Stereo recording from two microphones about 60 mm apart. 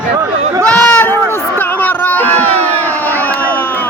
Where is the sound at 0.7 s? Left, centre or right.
Left.